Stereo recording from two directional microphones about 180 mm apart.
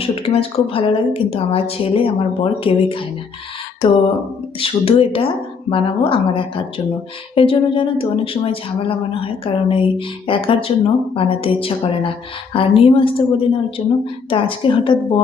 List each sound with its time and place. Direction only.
0.0 s a woman's voice: 30° left (ahead or behind)
4.6 s a woman's voice: 30° left (ahead or behind)